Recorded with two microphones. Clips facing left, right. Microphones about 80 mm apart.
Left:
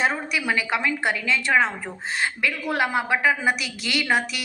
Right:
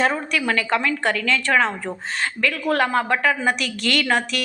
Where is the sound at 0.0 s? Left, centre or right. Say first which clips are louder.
Right 3 dB; centre.